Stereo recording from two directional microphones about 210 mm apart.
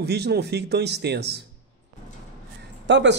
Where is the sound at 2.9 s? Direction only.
55° right (ahead or behind).